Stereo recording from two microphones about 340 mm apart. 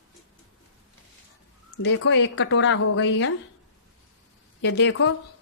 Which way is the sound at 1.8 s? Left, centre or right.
Left.